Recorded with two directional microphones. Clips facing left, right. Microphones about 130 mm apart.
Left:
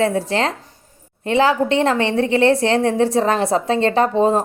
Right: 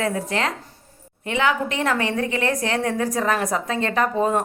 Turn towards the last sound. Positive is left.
turn(degrees=30)  # may be behind; listen again after turning